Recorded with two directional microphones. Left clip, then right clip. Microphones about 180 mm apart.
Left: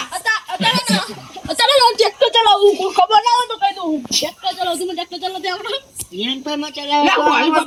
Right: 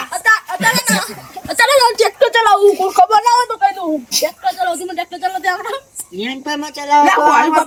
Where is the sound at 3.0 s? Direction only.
15° right (ahead or behind).